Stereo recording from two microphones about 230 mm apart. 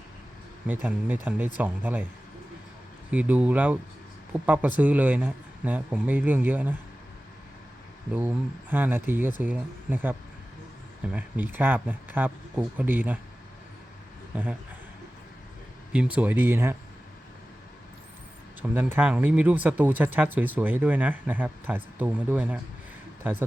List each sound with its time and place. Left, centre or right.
0.7 s speech: centre
3.1 s speech: centre
8.7 s speech: centre
14.3 s speech: centre
15.9 s speech: centre
18.7 s speech: centre